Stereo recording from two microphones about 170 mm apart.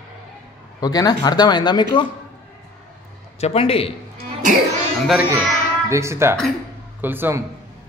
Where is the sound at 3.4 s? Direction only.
35° left (ahead or behind).